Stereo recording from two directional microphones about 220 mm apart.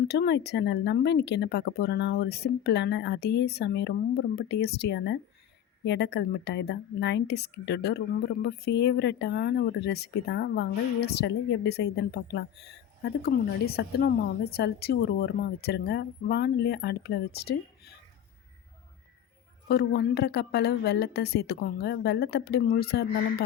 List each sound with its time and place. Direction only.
0.1 s a woman's voice: 50° left (ahead or behind)
19.6 s a woman's voice: 50° left (ahead or behind)